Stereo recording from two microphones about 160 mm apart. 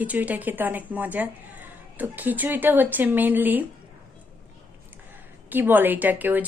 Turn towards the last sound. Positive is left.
turn(degrees=-10)  # may be behind; listen again after turning